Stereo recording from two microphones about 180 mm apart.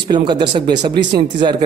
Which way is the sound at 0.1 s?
25° right (ahead or behind).